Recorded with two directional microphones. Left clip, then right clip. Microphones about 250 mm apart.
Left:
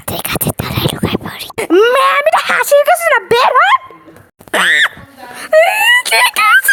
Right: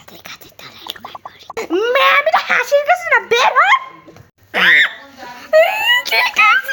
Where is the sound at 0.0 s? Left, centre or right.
Left.